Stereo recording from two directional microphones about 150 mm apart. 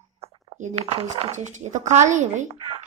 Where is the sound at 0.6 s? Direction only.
50° right (ahead or behind).